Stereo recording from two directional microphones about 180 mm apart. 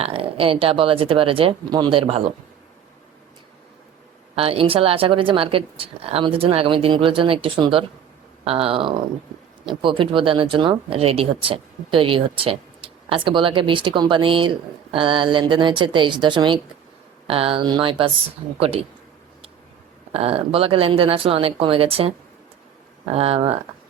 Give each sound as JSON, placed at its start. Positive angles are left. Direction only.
{"t": 0.0, "sound": "speech", "side_deg": -30}
{"t": 4.4, "sound": "speech", "side_deg": -30}
{"t": 20.1, "sound": "speech", "side_deg": -35}
{"t": 23.1, "sound": "speech", "side_deg": -35}